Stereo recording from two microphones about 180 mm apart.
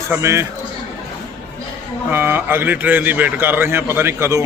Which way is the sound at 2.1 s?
10° right (ahead or behind).